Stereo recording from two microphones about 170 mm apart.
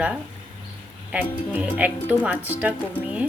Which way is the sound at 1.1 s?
10° right (ahead or behind).